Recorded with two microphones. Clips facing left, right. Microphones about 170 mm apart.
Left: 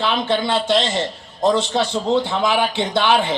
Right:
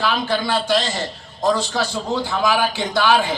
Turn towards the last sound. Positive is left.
turn(degrees=25)  # may be behind; listen again after turning